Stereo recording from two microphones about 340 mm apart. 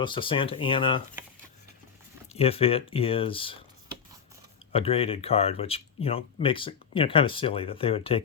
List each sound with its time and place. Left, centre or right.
0.0 s speech: centre
2.3 s speech: centre
4.7 s speech: centre